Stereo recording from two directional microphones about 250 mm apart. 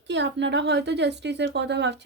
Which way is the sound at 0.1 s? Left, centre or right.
Right.